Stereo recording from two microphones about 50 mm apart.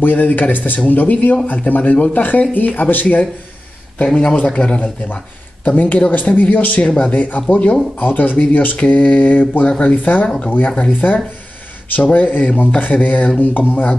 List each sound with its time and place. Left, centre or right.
0.0 s speech: left
4.1 s speech: centre
5.1 s speech: left
6.3 s speech: left
6.9 s speech: left